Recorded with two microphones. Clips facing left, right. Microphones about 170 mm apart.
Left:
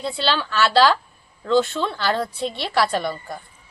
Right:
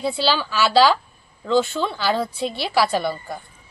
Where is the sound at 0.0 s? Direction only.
5° right (ahead or behind).